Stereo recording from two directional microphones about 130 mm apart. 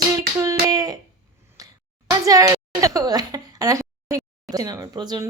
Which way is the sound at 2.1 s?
25° right (ahead or behind).